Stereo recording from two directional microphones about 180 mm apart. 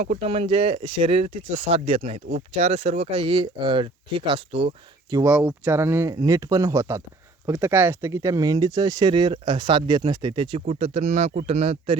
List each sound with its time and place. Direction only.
0.0 s speech: 35° right (ahead or behind)
5.2 s speech: 10° right (ahead or behind); by 11.9 s 35° right (ahead or behind)